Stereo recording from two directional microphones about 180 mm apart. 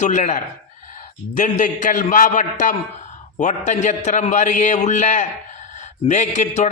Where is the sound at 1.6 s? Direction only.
45° left (ahead or behind).